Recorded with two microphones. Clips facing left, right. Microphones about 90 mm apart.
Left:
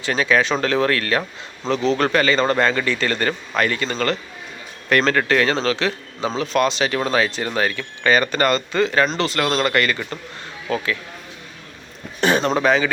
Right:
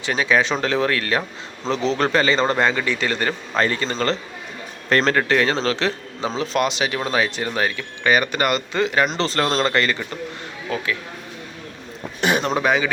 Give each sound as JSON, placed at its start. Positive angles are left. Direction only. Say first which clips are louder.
{"t": 0.0, "sound": "speech", "louder": "left 1 dB", "side_deg": -15}
{"t": 3.6, "sound": "a man's voice", "louder": "even", "side_deg": -25}
{"t": 9.1, "sound": "speech", "louder": "even", "side_deg": -30}
{"t": 12.2, "sound": "speech", "louder": "left 2 dB", "side_deg": -15}